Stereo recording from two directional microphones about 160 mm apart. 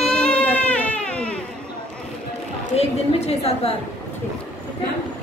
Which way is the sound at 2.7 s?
40° left (ahead or behind).